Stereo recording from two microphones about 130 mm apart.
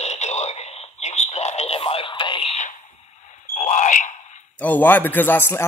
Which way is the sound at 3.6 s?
70° left (ahead or behind).